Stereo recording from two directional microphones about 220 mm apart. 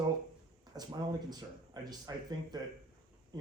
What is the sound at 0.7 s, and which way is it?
Speech, 20° right (ahead or behind).